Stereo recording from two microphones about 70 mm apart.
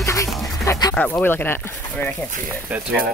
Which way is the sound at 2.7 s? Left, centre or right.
Right.